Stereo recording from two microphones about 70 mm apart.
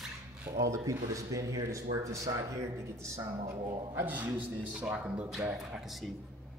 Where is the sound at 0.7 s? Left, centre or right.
Right.